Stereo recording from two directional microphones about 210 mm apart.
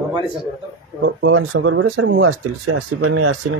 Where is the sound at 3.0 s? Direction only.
90° right.